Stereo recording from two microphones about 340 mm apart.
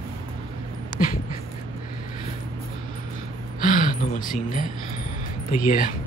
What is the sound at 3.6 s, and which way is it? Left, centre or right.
Speech, left.